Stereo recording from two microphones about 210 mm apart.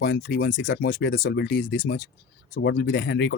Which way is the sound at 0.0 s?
50° left (ahead or behind).